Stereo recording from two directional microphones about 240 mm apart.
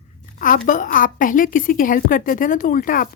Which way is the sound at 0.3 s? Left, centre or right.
Left.